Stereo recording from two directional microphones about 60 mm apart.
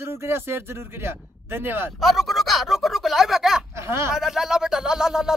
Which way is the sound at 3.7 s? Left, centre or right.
Right.